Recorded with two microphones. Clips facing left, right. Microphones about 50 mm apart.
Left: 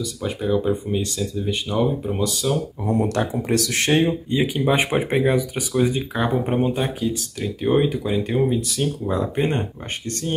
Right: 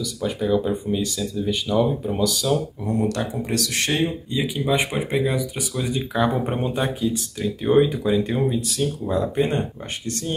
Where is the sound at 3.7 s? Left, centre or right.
Left.